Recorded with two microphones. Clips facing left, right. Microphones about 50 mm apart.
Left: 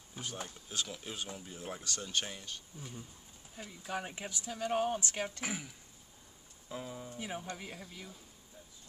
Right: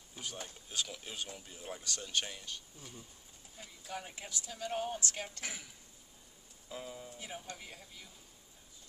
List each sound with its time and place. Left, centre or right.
0.1 s speech: centre
2.8 s speech: left
4.2 s speech: left
5.0 s speech: left
6.7 s speech: centre
7.2 s speech: left